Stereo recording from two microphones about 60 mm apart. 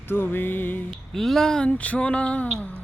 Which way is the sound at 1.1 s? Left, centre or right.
Centre.